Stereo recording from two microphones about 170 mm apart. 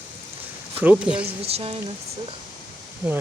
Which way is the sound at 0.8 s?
5° right (ahead or behind).